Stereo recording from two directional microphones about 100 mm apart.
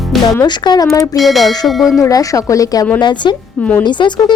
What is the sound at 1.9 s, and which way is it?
Speech, 35° left (ahead or behind).